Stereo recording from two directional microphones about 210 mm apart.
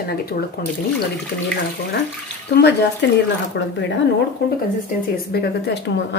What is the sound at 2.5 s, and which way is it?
Speech, 55° left (ahead or behind).